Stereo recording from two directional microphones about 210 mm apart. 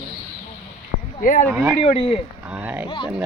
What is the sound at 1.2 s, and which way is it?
Speech, 40° left (ahead or behind).